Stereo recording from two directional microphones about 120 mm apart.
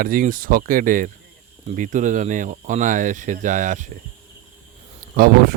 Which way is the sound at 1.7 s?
90° right.